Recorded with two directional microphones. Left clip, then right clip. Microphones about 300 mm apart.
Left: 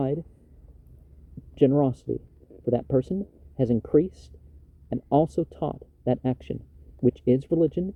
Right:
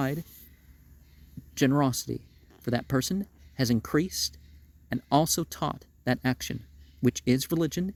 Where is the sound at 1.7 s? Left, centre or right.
Right.